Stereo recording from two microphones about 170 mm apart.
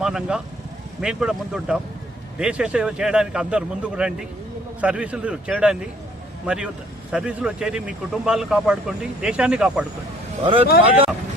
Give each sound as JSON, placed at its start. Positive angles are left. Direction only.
{"t": 0.0, "sound": "speech", "side_deg": -5}
{"t": 10.4, "sound": "speech", "side_deg": -30}